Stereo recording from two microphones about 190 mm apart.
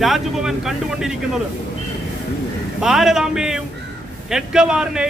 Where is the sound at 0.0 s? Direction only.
Centre (ahead or behind).